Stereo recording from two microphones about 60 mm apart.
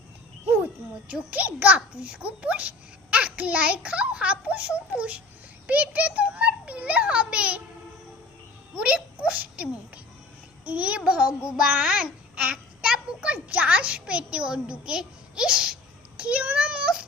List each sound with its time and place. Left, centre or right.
0.6 s a child's voice: right
2.0 s a child's voice: centre
8.7 s a child's voice: right
10.7 s child singing: right
11.7 s a child's voice: centre